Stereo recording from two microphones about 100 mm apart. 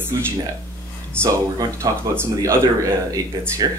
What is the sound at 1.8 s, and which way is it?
Speech, 30° right (ahead or behind).